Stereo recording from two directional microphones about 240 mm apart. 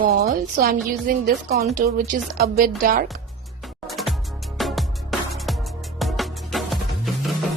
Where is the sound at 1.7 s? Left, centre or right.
Right.